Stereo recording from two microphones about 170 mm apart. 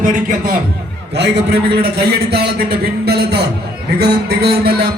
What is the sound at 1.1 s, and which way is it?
A man's voice, 80° right.